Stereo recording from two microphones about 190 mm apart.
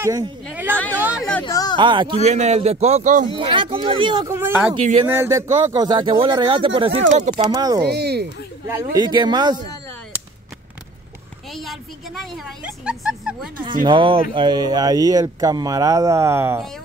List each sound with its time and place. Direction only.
0.0 s speech: 20° right (ahead or behind)
0.5 s a sound: 10° right (ahead or behind)
1.4 s speech: 20° left (ahead or behind)
1.8 s speech: 25° right (ahead or behind)
2.2 s a man's voice: 35° right (ahead or behind)
3.3 s speech: 25° right (ahead or behind)
4.4 s a man's voice: 10° right (ahead or behind); by 7.3 s 40° right (ahead or behind)
7.5 s speech: 20° right (ahead or behind)
7.8 s speech: 60° right (ahead or behind)
8.9 s speech: 25° right (ahead or behind)
11.5 s a woman's voice: centre (ahead or behind)
13.8 s speech: 25° right (ahead or behind)